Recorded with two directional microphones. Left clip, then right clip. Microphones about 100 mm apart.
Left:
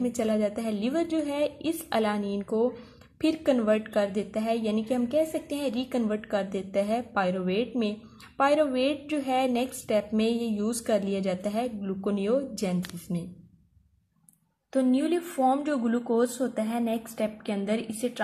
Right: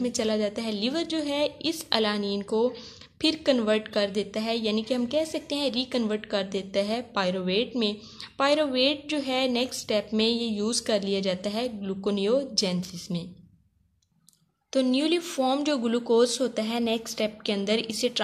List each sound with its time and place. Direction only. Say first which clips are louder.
0.2 s a woman's voice: left 1 dB; 5° right (ahead or behind)
14.7 s a woman's voice: right 1 dB; 20° right (ahead or behind)